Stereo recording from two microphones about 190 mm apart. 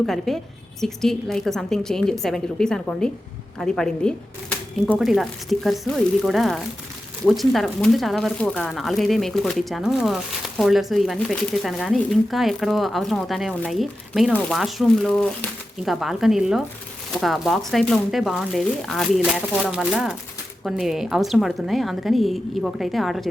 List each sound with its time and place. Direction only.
0.0 s speech: centre (ahead or behind)